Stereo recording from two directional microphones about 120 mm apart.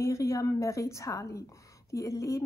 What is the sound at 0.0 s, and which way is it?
A woman's voice, 25° left (ahead or behind).